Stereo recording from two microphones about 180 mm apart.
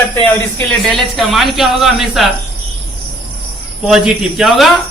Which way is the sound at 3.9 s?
Centre (ahead or behind).